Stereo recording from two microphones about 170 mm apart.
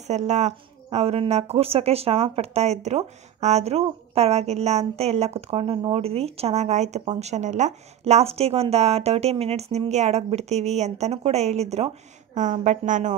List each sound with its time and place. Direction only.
0.0 s a woman's voice: 40° right (ahead or behind)